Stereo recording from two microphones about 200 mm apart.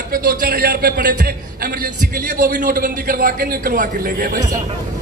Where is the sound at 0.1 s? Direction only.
45° right (ahead or behind).